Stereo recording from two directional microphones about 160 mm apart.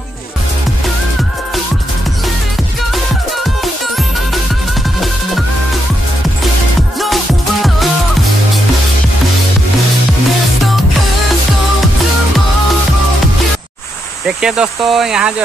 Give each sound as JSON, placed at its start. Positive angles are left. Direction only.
{"t": 3.6, "sound": "music", "side_deg": 0}
{"t": 14.2, "sound": "speech", "side_deg": -5}